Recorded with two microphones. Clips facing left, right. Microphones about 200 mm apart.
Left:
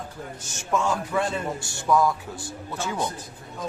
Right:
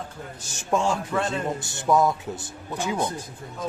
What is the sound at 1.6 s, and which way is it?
A man's voice, 20° right (ahead or behind).